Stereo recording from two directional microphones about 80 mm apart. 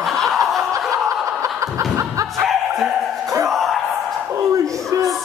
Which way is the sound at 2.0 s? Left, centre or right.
Right.